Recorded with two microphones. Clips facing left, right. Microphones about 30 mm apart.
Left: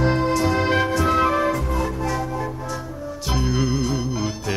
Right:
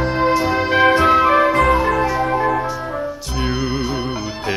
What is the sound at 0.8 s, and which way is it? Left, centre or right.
Music, right.